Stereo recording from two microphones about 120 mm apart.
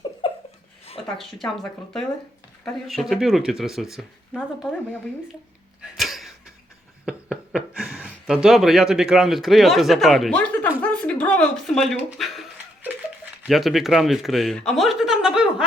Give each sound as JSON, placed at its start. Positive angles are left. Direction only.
{"t": 0.0, "sound": "laughter", "side_deg": 45}
{"t": 1.0, "sound": "speech", "side_deg": 0}
{"t": 5.8, "sound": "a sound", "side_deg": 0}
{"t": 7.0, "sound": "speech", "side_deg": -5}
{"t": 10.8, "sound": "a sound", "side_deg": 10}
{"t": 13.4, "sound": "speech", "side_deg": 0}